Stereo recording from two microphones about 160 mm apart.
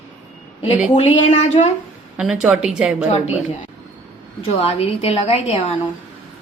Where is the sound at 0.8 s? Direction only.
45° left (ahead or behind).